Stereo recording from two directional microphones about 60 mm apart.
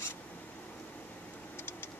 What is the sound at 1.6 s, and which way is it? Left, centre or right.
Vehicle, left.